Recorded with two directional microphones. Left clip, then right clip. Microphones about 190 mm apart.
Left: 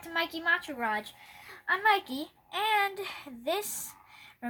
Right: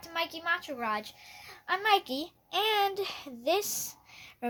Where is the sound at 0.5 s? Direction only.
55° right (ahead or behind).